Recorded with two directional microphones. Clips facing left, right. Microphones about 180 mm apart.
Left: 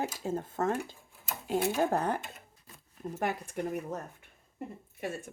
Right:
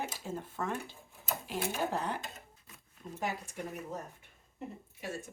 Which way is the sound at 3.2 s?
55° left (ahead or behind).